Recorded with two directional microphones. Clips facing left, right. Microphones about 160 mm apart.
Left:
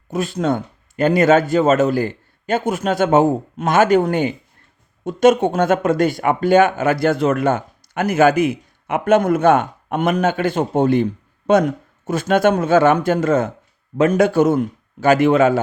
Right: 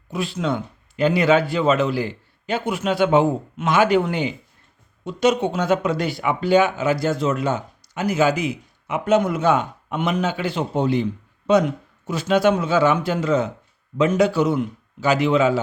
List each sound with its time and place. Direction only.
0.1 s speech: 45° left (ahead or behind)